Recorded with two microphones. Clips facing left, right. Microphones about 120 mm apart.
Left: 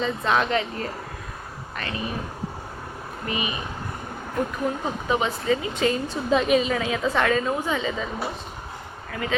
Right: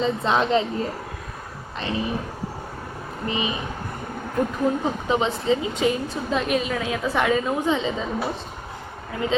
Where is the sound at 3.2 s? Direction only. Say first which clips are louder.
Right 2 dB; 25° right (ahead or behind).